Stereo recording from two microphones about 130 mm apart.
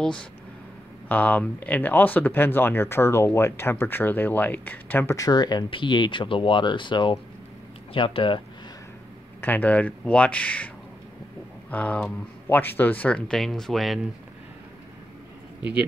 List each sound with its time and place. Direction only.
0.0 s speech: 5° left (ahead or behind)
5.1 s speech: 30° left (ahead or behind)
9.4 s speech: 10° left (ahead or behind)
11.7 s speech: 10° left (ahead or behind)